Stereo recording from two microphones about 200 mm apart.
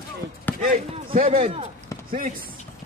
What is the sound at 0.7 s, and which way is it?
Speech, 45° right (ahead or behind).